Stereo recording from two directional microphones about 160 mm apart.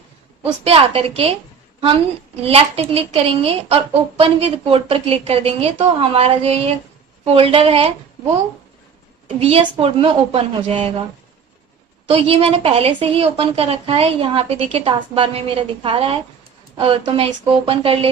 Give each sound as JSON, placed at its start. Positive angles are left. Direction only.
{"t": 0.6, "sound": "a woman's voice", "side_deg": -35}
{"t": 2.4, "sound": "a woman's voice", "side_deg": -40}
{"t": 9.4, "sound": "a woman's voice", "side_deg": -35}
{"t": 12.0, "sound": "a woman's voice", "side_deg": -35}